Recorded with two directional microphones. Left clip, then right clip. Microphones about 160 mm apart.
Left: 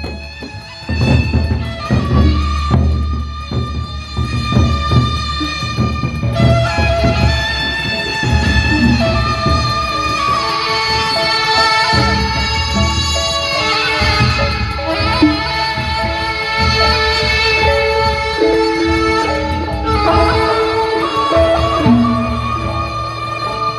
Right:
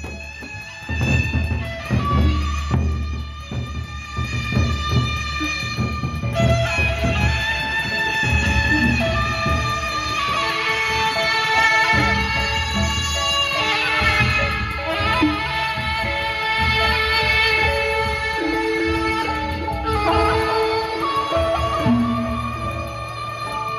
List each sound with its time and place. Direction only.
4.5 s music: 15° right (ahead or behind); by 20.8 s centre (ahead or behind)
21.0 s music: 20° left (ahead or behind)